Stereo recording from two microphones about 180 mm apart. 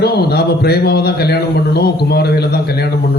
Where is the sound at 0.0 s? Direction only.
65° left (ahead or behind).